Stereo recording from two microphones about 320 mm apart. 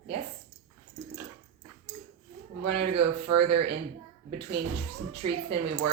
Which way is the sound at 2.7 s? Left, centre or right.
Right.